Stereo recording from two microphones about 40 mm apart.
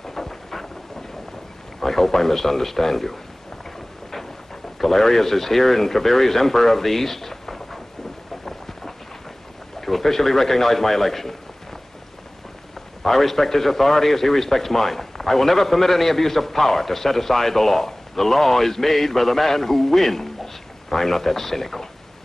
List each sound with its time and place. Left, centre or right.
0.0 s a sound: centre
1.8 s a man's voice: centre
4.7 s speech: centre
8.5 s a sound: centre
9.8 s a man's voice: centre
13.0 s a man's voice: centre